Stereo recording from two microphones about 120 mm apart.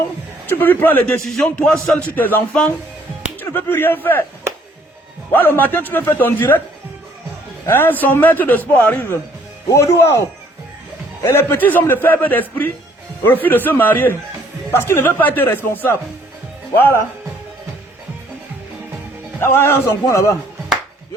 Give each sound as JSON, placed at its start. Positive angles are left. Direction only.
{"t": 0.4, "sound": "a man's voice", "side_deg": 15}
{"t": 5.3, "sound": "a man's voice", "side_deg": 15}
{"t": 7.7, "sound": "a man's voice", "side_deg": 15}
{"t": 19.4, "sound": "a man's voice", "side_deg": 20}